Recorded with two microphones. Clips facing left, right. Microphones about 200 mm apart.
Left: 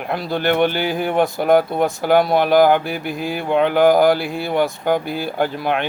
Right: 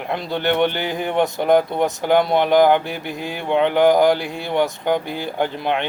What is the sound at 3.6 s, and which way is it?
Speech, 20° right (ahead or behind).